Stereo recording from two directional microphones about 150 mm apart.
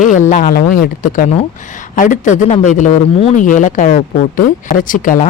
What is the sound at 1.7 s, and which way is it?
Speech, 60° left (ahead or behind).